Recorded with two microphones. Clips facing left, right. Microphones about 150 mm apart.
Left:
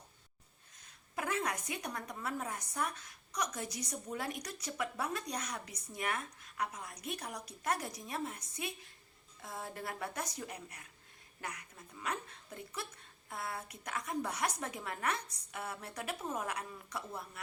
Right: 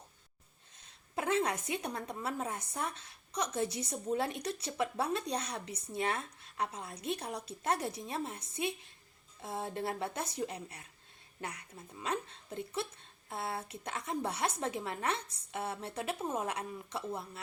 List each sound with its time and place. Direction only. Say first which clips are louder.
0.8 s a woman's voice: right 3 dB; 25° right (ahead or behind)